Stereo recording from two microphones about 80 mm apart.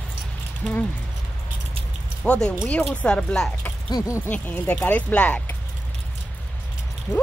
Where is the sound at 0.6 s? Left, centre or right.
Centre.